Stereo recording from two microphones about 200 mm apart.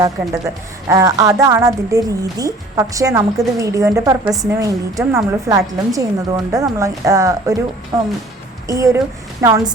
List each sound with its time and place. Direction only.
0.0 s a woman's voice: 15° right (ahead or behind)
8.6 s a woman's voice: 15° right (ahead or behind)